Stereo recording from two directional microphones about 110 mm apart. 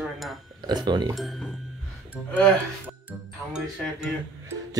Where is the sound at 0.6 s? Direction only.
40° right (ahead or behind).